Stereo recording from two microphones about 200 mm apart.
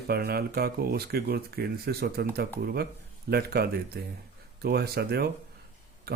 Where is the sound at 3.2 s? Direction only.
50° right (ahead or behind).